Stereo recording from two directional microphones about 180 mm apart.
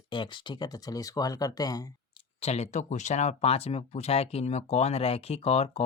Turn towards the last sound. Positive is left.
turn(degrees=35)  # may be behind; listen again after turning